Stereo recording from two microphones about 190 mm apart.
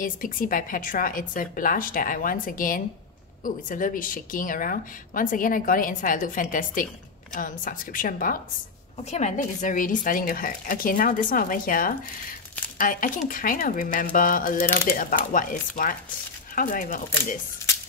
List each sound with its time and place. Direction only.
0.0 s a woman's voice: 45° left (ahead or behind)